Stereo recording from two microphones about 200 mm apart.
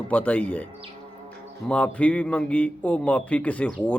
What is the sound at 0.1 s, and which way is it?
Speech, 10° left (ahead or behind).